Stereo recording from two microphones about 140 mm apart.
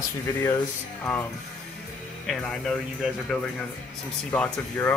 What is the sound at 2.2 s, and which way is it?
Speech, centre (ahead or behind).